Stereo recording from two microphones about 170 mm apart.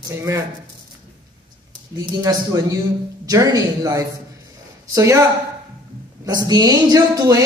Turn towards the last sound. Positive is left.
turn(degrees=-20)  # may be behind; listen again after turning